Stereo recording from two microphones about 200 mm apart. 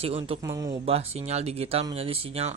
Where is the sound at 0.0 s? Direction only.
30° right (ahead or behind).